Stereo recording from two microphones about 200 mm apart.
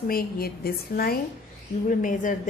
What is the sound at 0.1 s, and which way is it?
A woman's voice, 50° left (ahead or behind).